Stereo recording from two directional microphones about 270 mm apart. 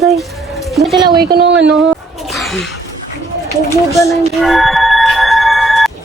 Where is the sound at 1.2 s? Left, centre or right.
Right.